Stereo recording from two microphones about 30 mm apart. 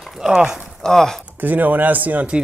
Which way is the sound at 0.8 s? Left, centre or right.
Centre.